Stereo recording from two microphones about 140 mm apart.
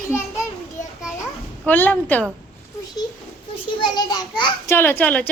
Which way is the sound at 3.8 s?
30° left (ahead or behind).